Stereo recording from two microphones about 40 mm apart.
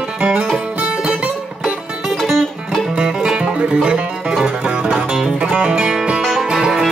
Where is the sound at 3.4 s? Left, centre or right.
Right.